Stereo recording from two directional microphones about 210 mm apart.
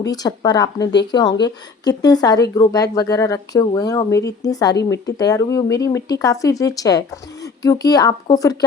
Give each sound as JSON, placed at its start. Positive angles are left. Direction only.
{"t": 0.0, "sound": "a woman's voice", "side_deg": 20}